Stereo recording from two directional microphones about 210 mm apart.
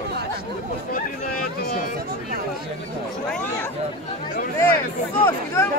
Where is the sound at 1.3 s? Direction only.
45° left (ahead or behind).